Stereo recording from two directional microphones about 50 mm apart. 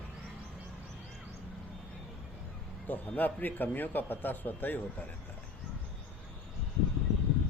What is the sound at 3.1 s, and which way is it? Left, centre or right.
Speech, left.